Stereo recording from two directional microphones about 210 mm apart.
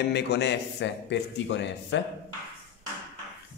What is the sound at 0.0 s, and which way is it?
A man's voice, 50° left (ahead or behind).